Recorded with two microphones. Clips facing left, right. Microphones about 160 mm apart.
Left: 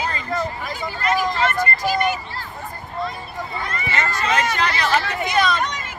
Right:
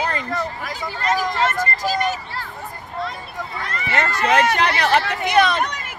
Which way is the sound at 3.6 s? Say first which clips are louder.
Right 4 dB; 70° right (ahead or behind).